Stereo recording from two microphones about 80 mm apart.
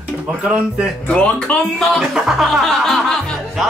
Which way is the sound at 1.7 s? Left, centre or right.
Centre.